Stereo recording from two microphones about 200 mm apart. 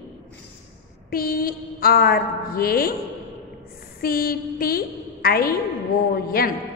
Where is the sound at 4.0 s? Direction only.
50° left (ahead or behind).